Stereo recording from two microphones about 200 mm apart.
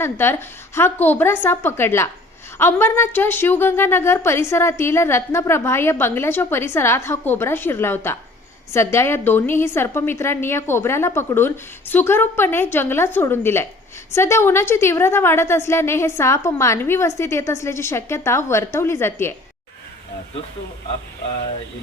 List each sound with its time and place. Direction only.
0.0 s a woman's voice: 10° left (ahead or behind)